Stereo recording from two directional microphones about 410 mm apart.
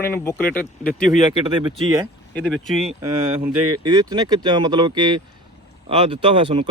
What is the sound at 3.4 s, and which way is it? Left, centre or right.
Speech, centre.